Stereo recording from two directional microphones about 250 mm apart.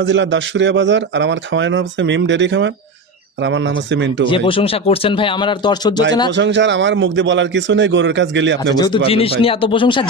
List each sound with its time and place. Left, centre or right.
0.0 s a man's voice: right
4.3 s speech: left
6.3 s a man's voice: right
8.7 s speech: centre